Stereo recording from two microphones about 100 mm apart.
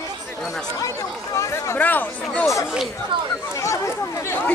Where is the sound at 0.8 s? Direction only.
35° left (ahead or behind).